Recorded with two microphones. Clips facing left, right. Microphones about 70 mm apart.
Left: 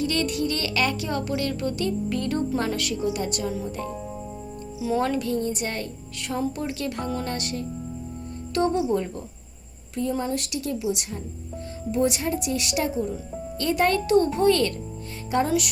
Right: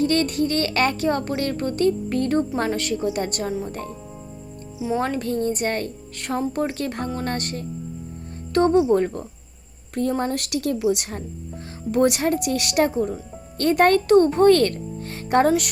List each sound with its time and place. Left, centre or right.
0.0 s speech: right
4.8 s speech: right